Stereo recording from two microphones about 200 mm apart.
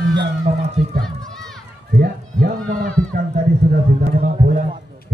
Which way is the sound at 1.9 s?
45° right (ahead or behind).